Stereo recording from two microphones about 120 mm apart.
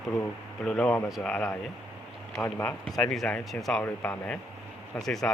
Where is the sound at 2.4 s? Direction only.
25° left (ahead or behind).